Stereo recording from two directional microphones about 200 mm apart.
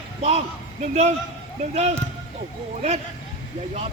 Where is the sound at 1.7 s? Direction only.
35° right (ahead or behind).